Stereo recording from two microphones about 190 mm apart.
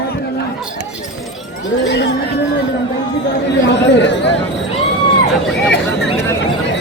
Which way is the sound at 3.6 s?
65° left (ahead or behind).